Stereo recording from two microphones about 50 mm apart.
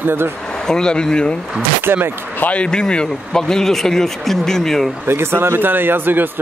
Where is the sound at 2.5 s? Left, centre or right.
Centre.